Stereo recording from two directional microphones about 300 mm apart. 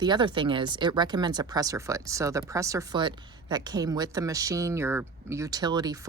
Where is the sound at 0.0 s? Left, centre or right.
Centre.